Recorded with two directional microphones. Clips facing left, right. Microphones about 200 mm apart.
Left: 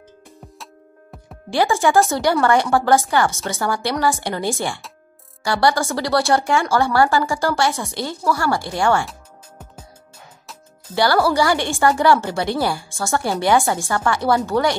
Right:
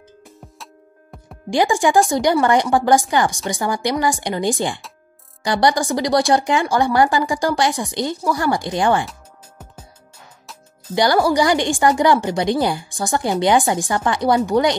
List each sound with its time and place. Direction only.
1.5 s speech: 15° right (ahead or behind)
11.0 s speech: 15° right (ahead or behind)